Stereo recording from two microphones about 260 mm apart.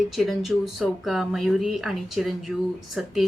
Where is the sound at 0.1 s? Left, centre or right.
Centre.